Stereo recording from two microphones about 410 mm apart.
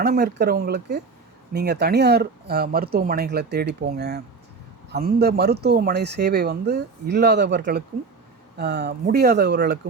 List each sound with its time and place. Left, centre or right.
0.0 s speech: right